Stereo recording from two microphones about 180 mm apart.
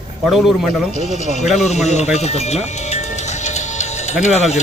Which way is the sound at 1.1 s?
40° left (ahead or behind).